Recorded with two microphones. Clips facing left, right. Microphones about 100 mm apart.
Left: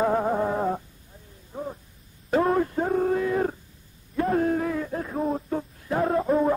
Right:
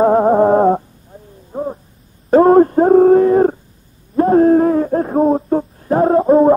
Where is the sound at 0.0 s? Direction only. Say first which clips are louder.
Right 12 dB; 40° right (ahead or behind).